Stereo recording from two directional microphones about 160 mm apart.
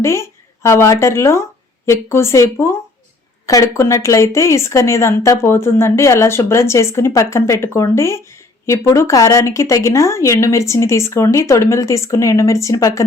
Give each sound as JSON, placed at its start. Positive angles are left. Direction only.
{"t": 0.0, "sound": "speech", "side_deg": 15}